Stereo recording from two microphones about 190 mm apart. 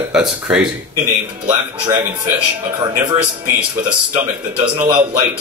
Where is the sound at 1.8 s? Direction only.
20° right (ahead or behind).